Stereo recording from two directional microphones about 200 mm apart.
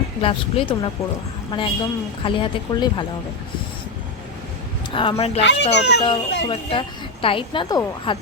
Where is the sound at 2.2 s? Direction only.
25° left (ahead or behind).